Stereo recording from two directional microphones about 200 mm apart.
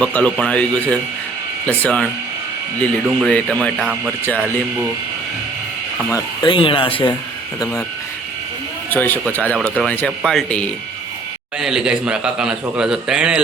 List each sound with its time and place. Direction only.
0.0 s a man's voice: 5° left (ahead or behind)
6.1 s speech: 25° left (ahead or behind)
8.9 s a man's voice: 10° left (ahead or behind)